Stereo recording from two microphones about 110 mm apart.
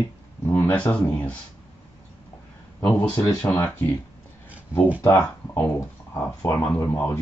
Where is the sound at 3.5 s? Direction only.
20° left (ahead or behind).